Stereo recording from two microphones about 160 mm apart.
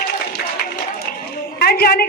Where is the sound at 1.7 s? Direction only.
70° left (ahead or behind).